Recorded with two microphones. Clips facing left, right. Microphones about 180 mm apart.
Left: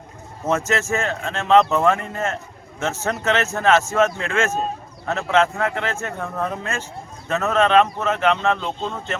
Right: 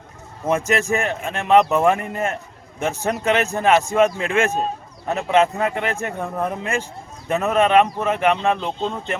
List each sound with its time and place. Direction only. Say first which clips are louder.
0.4 s a man's voice: right 2 dB; 15° right (ahead or behind)